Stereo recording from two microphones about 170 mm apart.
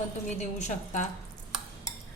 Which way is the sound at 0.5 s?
45° left (ahead or behind).